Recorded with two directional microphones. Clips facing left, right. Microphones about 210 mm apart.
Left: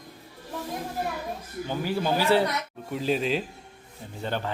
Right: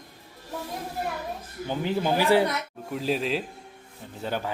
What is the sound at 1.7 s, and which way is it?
Speech, 20° right (ahead or behind).